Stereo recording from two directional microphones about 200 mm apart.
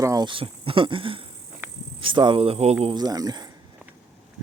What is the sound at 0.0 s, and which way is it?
Speech, 20° right (ahead or behind).